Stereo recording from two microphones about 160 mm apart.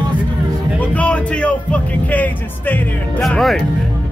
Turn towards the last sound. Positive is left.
turn(degrees=0)  # may be behind; listen again after turning